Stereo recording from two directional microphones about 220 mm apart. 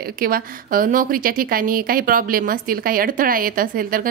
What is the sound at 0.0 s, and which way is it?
A woman's voice, 40° right (ahead or behind).